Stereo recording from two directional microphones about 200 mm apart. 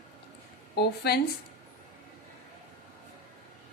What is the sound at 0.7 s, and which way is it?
Speech, 55° left (ahead or behind).